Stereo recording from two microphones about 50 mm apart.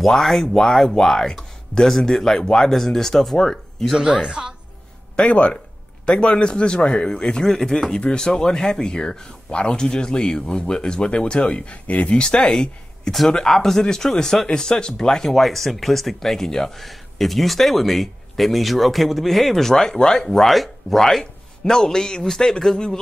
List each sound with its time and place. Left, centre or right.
0.0 s speech: centre
4.0 s a woman's voice: centre
5.1 s speech: left